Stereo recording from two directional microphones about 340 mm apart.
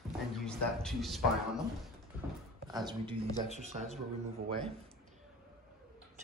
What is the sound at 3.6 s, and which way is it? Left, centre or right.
Speech, centre.